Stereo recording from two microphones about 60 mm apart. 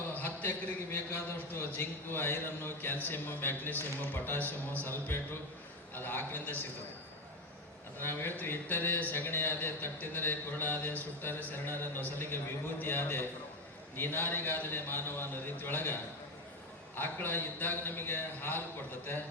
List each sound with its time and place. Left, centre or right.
0.1 s a man's voice: left
7.9 s a man's voice: left